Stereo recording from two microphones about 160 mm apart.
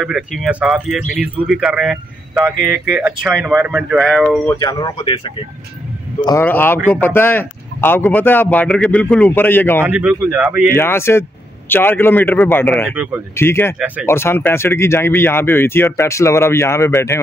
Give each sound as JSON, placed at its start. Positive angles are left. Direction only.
{"t": 0.0, "sound": "speech", "side_deg": 0}
{"t": 4.6, "sound": "speech", "side_deg": 25}
{"t": 6.4, "sound": "speech", "side_deg": 10}
{"t": 9.8, "sound": "speech", "side_deg": -10}
{"t": 10.8, "sound": "speech", "side_deg": 15}
{"t": 12.9, "sound": "speech", "side_deg": -10}
{"t": 13.4, "sound": "speech", "side_deg": 15}
{"t": 13.7, "sound": "speech", "side_deg": -10}
{"t": 14.0, "sound": "speech", "side_deg": 15}